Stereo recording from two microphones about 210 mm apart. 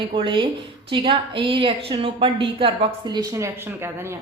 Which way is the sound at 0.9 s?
25° right (ahead or behind).